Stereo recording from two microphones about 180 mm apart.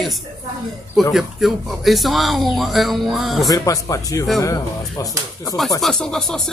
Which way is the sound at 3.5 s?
20° left (ahead or behind).